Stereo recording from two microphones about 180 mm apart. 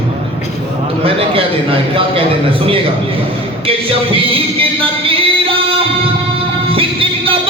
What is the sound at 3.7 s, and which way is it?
Music, 30° right (ahead or behind).